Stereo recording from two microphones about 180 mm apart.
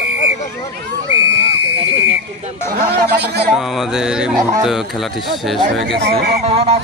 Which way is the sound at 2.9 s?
65° right (ahead or behind).